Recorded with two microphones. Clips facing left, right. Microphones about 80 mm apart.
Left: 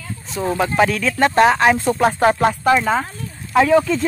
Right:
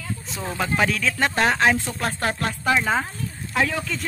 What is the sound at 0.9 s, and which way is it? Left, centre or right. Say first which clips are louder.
Speech: left 7 dB; centre.